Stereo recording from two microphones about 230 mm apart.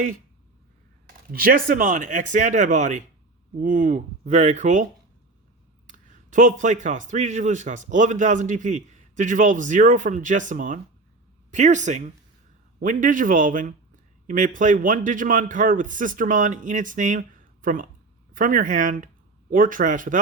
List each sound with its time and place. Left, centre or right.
1.0 s speech: right
5.9 s speech: right